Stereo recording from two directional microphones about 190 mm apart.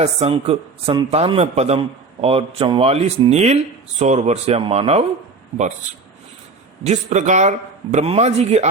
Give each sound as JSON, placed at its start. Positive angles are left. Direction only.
{"t": 0.0, "sound": "speech", "side_deg": -35}
{"t": 6.8, "sound": "speech", "side_deg": -40}